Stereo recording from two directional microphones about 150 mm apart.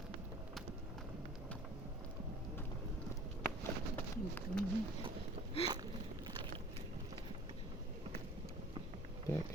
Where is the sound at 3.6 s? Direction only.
15° left (ahead or behind).